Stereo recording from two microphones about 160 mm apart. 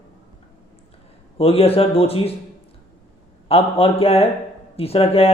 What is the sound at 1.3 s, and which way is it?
Speech, 40° left (ahead or behind).